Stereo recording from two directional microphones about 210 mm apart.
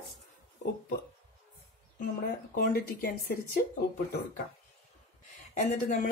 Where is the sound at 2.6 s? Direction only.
40° left (ahead or behind).